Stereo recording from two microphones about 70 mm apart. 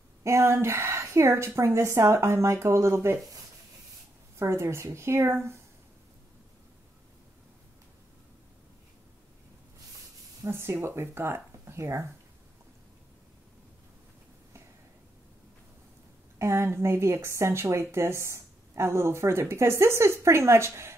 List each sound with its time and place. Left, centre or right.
0.2 s a woman's voice: right
4.4 s a woman's voice: right
10.4 s a woman's voice: right
16.3 s a woman's voice: right